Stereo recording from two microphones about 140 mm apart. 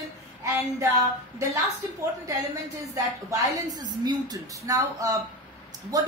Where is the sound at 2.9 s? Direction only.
25° right (ahead or behind).